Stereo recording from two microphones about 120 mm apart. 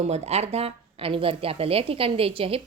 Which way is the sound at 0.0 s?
60° right (ahead or behind).